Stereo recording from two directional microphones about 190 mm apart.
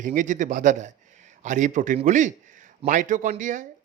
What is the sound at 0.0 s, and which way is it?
A man's voice, 45° right (ahead or behind).